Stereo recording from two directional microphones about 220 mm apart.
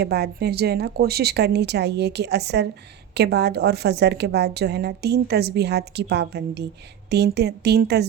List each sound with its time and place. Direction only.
0.0 s a woman's voice: 45° right (ahead or behind)